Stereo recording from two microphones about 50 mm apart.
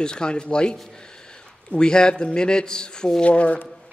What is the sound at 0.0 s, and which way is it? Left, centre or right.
A man's voice, centre.